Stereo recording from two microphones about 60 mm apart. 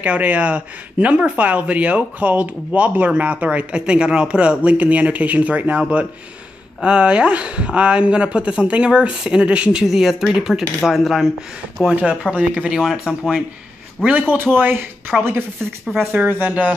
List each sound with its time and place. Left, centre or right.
0.0 s speech: right
9.8 s speech: centre
11.9 s speech: centre
13.1 s speech: left
14.0 s speech: centre
14.3 s speech: right
15.1 s speech: centre
16.1 s speech: right